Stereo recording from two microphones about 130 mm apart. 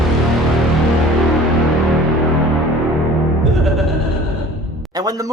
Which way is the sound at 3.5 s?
Centre (ahead or behind).